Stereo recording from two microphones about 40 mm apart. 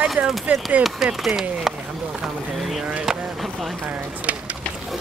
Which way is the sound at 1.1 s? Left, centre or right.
Centre.